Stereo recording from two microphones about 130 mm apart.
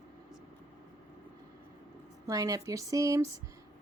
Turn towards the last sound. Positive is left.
turn(degrees=-25)  # may be behind; listen again after turning